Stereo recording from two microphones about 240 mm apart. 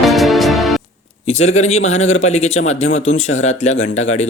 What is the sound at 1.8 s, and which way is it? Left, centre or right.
Speech, left.